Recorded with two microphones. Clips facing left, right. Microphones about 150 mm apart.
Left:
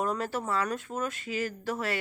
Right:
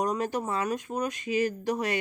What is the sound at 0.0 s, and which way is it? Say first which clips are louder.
Speech: right 2 dB; 15° right (ahead or behind).